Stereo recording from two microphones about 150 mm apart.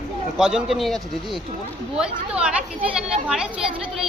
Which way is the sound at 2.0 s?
5° right (ahead or behind).